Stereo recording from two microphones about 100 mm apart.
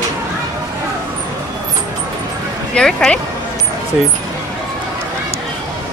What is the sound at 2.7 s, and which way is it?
Speech, 5° left (ahead or behind).